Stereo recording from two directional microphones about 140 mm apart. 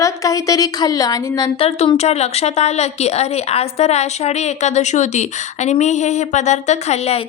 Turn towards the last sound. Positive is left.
turn(degrees=50)  # may be behind; listen again after turning